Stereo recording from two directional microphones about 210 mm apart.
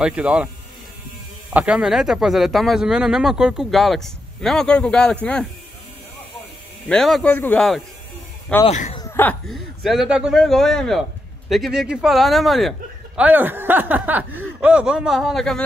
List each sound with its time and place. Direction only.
0.0 s speech: 5° right (ahead or behind)
1.5 s speech: 5° right (ahead or behind)
6.9 s speech: centre (ahead or behind)
8.6 s speech: 35° left (ahead or behind)
8.9 s speech: 10° left (ahead or behind)